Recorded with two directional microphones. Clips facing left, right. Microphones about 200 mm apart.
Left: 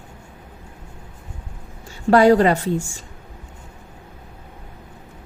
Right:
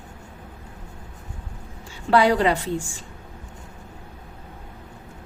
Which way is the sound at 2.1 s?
45° left (ahead or behind).